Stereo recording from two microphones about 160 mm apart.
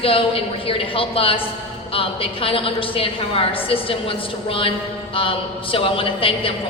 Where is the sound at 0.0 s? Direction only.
35° left (ahead or behind).